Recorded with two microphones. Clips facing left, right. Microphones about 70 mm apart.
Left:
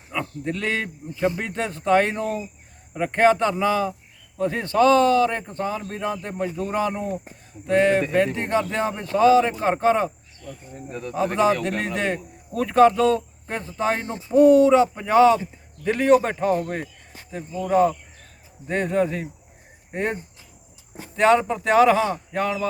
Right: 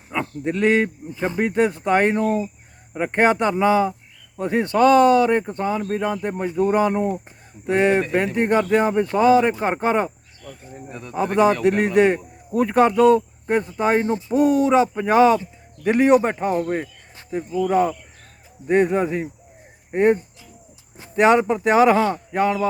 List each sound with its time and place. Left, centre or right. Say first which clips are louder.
0.1 s speech: right 3 dB; right
1.5 s speech: right 8 dB; centre
1.9 s speech: left 2 dB; right
11.3 s speech: right 5 dB; centre; by 20.1 s right
21.2 s speech: right 2 dB; centre